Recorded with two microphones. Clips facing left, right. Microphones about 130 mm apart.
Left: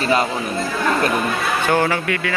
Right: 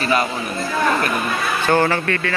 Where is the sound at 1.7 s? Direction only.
10° left (ahead or behind).